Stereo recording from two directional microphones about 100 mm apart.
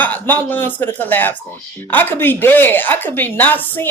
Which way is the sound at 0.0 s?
20° left (ahead or behind).